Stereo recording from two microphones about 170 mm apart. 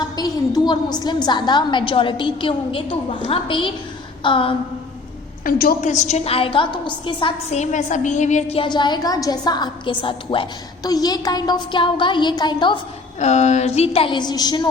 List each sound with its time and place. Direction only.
0.2 s a woman's voice: 25° left (ahead or behind)
5.5 s a woman's voice: 60° left (ahead or behind); by 12.8 s 25° left (ahead or behind)
13.1 s a woman's voice: 40° left (ahead or behind); by 14.7 s 25° left (ahead or behind)